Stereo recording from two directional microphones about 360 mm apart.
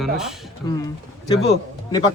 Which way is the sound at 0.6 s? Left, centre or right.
Centre.